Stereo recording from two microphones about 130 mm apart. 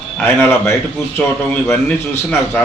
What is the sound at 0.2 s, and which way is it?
A man's voice, 20° left (ahead or behind).